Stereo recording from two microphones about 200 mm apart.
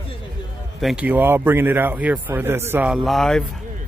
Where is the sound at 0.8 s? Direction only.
5° right (ahead or behind).